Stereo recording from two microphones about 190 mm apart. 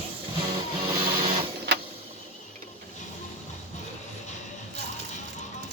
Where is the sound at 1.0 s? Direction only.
30° right (ahead or behind).